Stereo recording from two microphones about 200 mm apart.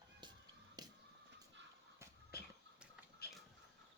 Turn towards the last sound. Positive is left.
turn(degrees=50)  # may be behind; listen again after turning